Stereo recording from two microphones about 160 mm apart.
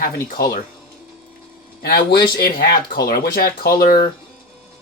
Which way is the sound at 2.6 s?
70° left (ahead or behind).